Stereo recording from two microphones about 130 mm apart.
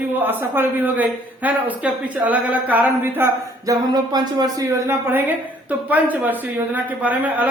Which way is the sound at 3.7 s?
30° right (ahead or behind).